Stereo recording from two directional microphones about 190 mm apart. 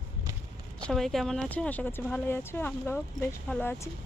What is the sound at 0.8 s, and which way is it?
Speech, centre (ahead or behind).